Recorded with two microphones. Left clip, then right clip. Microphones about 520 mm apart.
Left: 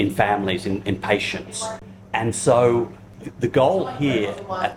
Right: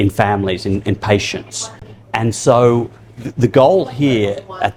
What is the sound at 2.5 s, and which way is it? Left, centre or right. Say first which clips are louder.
Speech: right 5 dB; right.